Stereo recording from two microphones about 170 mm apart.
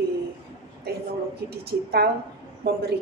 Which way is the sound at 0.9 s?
70° right (ahead or behind).